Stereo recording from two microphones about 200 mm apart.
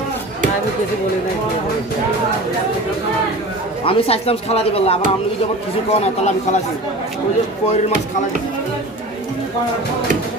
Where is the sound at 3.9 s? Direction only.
30° left (ahead or behind).